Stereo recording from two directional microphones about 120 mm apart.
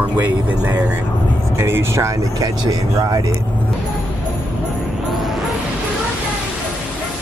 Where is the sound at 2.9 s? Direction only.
35° right (ahead or behind).